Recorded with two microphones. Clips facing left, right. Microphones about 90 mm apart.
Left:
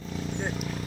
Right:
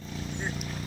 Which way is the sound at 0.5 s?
15° left (ahead or behind).